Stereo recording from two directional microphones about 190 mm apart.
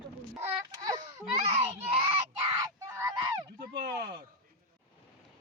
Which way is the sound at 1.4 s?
35° right (ahead or behind).